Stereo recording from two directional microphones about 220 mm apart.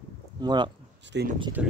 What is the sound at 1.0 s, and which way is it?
Speech, 50° right (ahead or behind).